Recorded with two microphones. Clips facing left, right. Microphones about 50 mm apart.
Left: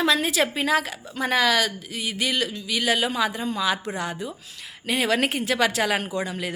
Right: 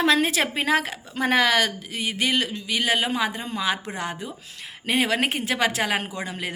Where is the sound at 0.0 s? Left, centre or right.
Right.